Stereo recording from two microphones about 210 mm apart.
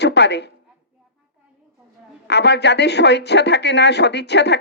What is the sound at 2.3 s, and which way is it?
Speech, 55° left (ahead or behind).